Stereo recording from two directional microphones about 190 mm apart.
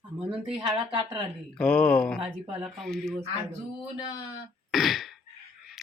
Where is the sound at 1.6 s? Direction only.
5° left (ahead or behind).